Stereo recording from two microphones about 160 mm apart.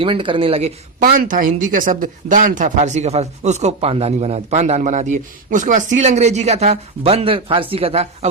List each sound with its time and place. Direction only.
0.0 s speech: 30° right (ahead or behind)
0.9 s speech: 55° right (ahead or behind); by 8.3 s 40° right (ahead or behind)